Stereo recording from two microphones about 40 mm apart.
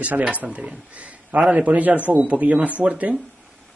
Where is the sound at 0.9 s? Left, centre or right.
Right.